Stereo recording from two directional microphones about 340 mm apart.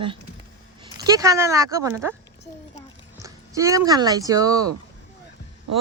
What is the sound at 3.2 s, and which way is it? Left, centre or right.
Speech, centre.